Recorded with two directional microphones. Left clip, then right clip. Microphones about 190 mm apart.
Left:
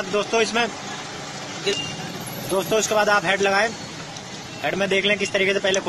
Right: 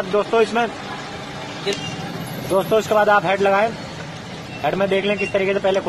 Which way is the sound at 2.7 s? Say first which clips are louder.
Right 3 dB; centre (ahead or behind).